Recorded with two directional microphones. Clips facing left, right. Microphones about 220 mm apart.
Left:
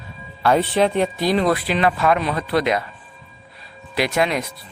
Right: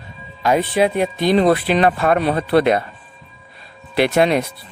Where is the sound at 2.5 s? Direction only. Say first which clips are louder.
Right 5 dB; 55° right (ahead or behind).